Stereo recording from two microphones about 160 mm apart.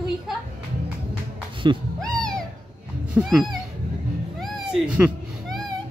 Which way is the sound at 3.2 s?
5° right (ahead or behind).